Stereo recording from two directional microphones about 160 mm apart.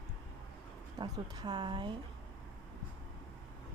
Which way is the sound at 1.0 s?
30° right (ahead or behind).